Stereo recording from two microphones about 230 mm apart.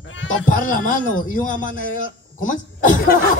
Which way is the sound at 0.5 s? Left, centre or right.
Left.